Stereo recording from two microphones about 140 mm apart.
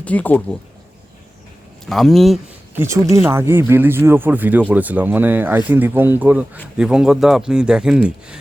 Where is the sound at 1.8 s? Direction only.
Centre (ahead or behind).